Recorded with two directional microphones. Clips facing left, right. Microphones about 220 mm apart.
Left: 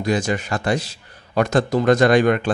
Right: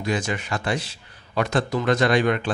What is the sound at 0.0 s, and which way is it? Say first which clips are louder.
A man's voice: left 5 dB; 40° left (ahead or behind).